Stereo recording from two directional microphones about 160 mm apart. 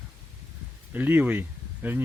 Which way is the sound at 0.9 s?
10° right (ahead or behind).